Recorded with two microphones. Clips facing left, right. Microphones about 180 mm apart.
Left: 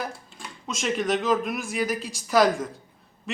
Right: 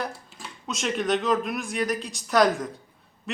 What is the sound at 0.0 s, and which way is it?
Speech, centre (ahead or behind).